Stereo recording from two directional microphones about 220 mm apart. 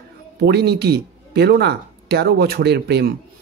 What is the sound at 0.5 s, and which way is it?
Speech, 45° right (ahead or behind).